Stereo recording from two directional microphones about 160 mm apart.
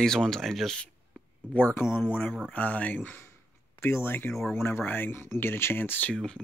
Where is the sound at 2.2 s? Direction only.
Centre (ahead or behind).